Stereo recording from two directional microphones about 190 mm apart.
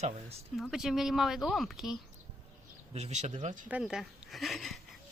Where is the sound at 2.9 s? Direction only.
35° right (ahead or behind).